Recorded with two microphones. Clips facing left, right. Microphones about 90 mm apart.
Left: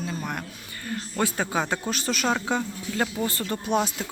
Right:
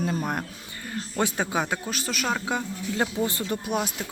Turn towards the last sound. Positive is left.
turn(degrees=-10)  # may be behind; listen again after turning